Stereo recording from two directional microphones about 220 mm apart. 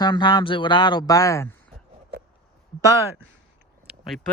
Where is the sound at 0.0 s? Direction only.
20° left (ahead or behind).